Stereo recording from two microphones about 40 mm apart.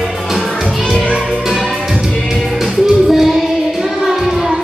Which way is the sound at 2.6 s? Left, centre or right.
Centre.